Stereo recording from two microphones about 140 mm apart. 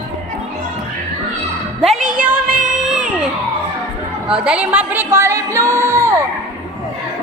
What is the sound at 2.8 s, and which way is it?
Baby cry, 5° right (ahead or behind).